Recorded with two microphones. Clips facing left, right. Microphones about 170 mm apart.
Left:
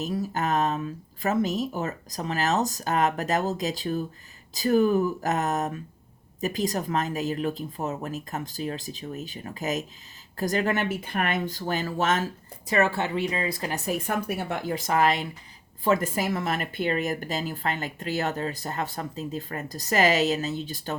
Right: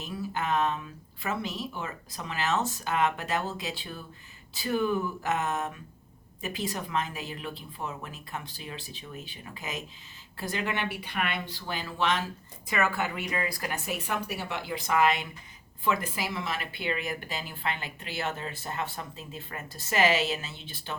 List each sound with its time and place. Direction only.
0.0 s speech: 40° left (ahead or behind)